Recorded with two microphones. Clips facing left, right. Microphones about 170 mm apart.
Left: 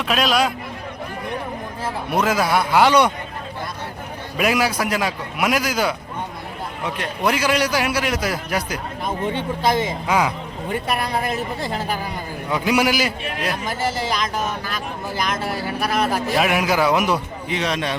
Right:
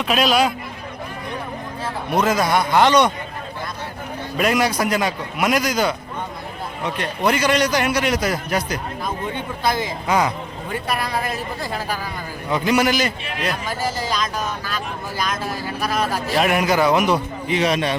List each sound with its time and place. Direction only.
0.0 s a man's voice: centre (ahead or behind)
2.0 s a man's voice: 10° left (ahead or behind)
4.4 s a man's voice: 5° left (ahead or behind)
9.0 s speech: 20° left (ahead or behind)
10.1 s a man's voice: 5° left (ahead or behind)
12.5 s a man's voice: 5° left (ahead or behind)
16.3 s a man's voice: centre (ahead or behind)